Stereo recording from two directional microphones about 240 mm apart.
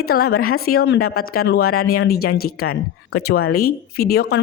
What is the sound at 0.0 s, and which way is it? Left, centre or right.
Speech, left.